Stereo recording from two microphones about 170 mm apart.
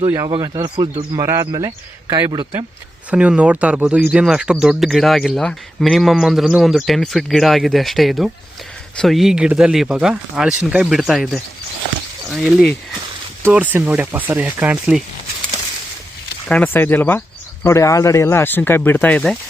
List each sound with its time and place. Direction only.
0.3 s speech: 25° right (ahead or behind)
3.1 s speech: 5° right (ahead or behind)
16.5 s speech: 10° left (ahead or behind)